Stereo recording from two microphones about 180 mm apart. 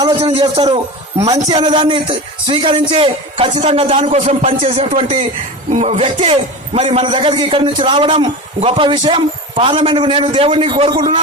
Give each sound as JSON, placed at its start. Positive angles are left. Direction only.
{"t": 0.0, "sound": "a man's voice", "side_deg": -25}